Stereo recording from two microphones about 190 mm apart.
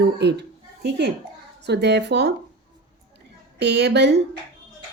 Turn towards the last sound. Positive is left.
turn(degrees=-60)  # may be behind; listen again after turning